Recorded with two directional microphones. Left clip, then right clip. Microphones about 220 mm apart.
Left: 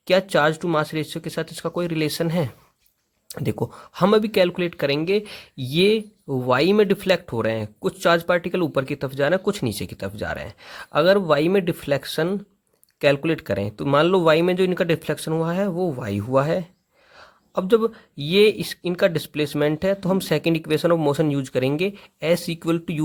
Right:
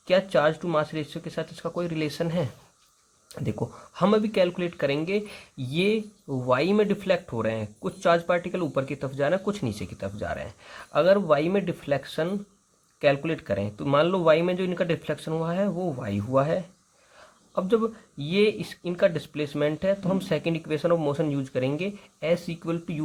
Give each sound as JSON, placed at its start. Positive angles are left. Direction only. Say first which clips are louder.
{"t": 0.1, "sound": "speech", "louder": "left 3 dB", "side_deg": 45}